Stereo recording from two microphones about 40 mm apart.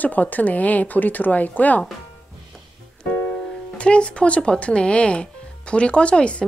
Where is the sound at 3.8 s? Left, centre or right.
Left.